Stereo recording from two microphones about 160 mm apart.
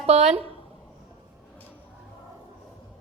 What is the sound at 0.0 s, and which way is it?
Speech, 40° right (ahead or behind).